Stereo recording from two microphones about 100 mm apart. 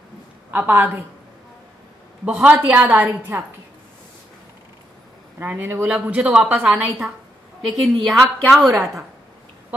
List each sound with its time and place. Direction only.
0.5 s a woman's voice: 20° right (ahead or behind)
2.2 s a woman's voice: 15° right (ahead or behind)
5.4 s a woman's voice: 20° right (ahead or behind)
7.6 s a woman's voice: centre (ahead or behind)
8.6 s a woman's voice: centre (ahead or behind)